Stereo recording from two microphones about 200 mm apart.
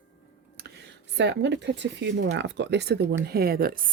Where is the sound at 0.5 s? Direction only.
55° right (ahead or behind).